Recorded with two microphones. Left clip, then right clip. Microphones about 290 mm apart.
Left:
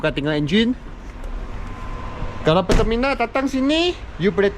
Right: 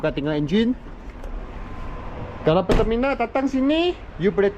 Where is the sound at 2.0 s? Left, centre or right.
Centre.